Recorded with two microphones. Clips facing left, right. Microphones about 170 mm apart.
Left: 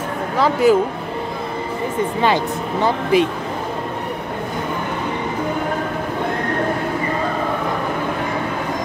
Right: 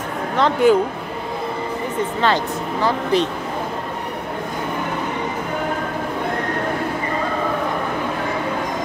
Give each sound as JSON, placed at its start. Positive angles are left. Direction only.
{"t": 0.4, "sound": "speech", "side_deg": 0}
{"t": 2.2, "sound": "speech", "side_deg": 15}